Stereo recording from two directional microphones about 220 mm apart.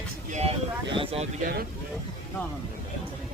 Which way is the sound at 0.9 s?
25° right (ahead or behind).